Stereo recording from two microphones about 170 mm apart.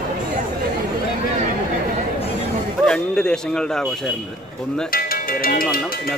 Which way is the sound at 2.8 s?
5° left (ahead or behind).